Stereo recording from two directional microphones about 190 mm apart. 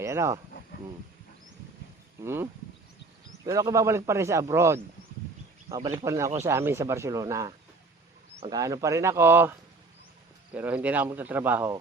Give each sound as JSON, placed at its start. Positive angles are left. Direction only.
{"t": 0.0, "sound": "speech", "side_deg": -15}
{"t": 2.2, "sound": "speech", "side_deg": -10}